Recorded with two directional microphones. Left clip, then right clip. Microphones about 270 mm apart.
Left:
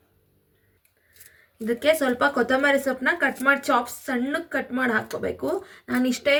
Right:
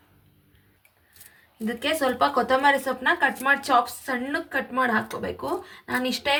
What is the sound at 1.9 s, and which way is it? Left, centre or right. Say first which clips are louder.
Speech: even; centre.